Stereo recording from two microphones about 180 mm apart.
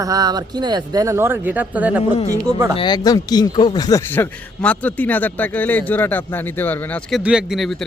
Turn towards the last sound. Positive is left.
turn(degrees=0)  # may be behind; listen again after turning